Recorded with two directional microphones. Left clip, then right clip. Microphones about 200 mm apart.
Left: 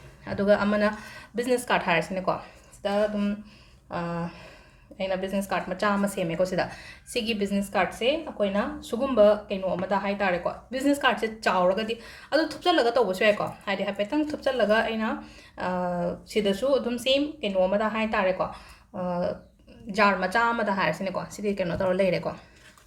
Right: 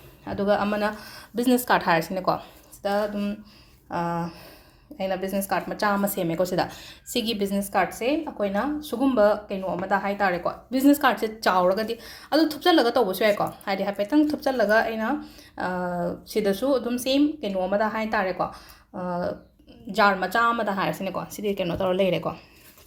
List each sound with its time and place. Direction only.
0.3 s a woman's voice: 15° right (ahead or behind)